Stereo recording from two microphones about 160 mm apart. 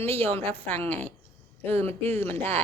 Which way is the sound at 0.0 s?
40° right (ahead or behind).